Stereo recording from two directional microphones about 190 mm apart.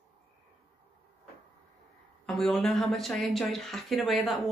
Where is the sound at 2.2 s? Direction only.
5° left (ahead or behind).